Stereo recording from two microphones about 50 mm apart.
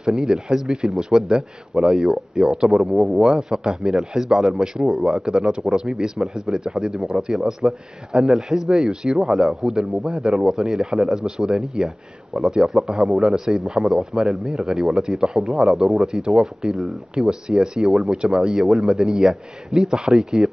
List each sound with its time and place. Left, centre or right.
0.0 s speech: centre